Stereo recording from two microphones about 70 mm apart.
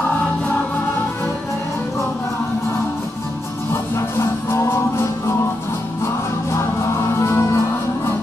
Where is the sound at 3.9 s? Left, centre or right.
Left.